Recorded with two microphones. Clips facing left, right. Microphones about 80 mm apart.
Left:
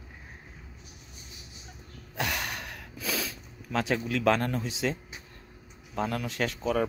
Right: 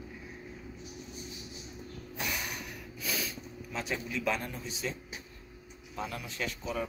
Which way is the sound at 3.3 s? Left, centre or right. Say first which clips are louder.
Left 7 dB; left.